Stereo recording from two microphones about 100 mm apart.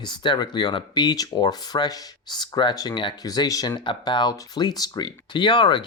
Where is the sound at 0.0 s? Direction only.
45° left (ahead or behind).